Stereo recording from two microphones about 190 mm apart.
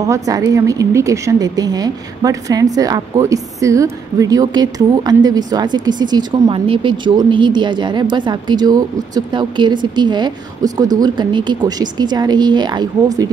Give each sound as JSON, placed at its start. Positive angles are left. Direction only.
{"t": 0.0, "sound": "speech", "side_deg": -15}